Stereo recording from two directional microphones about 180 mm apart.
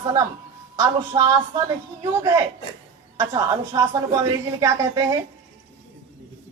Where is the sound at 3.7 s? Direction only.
25° right (ahead or behind).